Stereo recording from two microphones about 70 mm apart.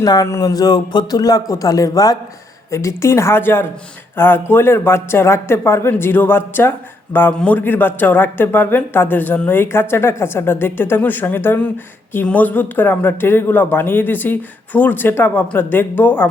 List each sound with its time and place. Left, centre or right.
0.0 s a man's voice: left
0.3 s a sound: left
0.5 s a man's voice: left
2.6 s speech: left